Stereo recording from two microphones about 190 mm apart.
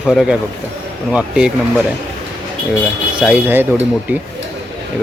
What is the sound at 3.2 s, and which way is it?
Speech, 10° right (ahead or behind).